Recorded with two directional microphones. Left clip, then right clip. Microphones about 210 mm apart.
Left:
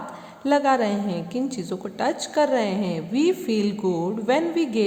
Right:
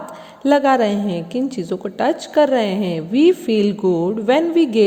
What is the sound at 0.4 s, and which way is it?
A woman's voice, 30° right (ahead or behind).